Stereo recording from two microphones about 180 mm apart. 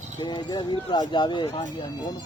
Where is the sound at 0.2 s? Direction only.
25° left (ahead or behind).